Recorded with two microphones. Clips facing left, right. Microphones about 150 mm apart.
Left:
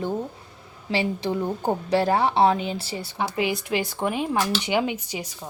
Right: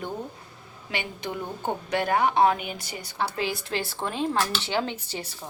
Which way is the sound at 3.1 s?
15° left (ahead or behind).